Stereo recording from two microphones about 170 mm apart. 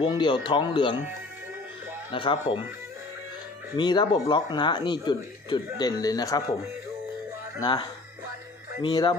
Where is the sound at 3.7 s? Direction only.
25° left (ahead or behind).